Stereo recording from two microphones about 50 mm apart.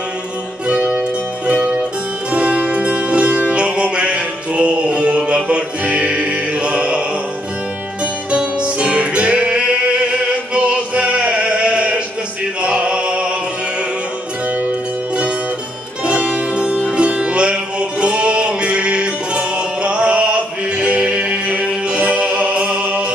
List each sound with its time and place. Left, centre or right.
0.9 s music: right
16.1 s music: right